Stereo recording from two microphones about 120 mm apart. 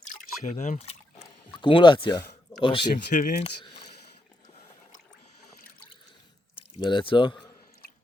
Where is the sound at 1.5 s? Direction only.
40° left (ahead or behind).